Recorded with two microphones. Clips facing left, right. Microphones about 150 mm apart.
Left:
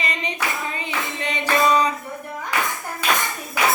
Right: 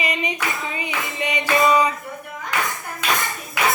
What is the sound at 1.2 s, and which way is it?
Music, 10° right (ahead or behind).